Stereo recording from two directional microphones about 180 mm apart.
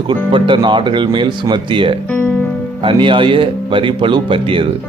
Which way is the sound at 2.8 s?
30° right (ahead or behind).